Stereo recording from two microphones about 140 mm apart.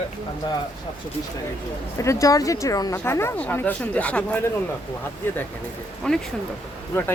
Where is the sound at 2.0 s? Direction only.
20° left (ahead or behind).